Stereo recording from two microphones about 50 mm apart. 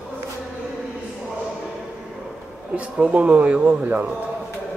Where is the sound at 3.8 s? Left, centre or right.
Right.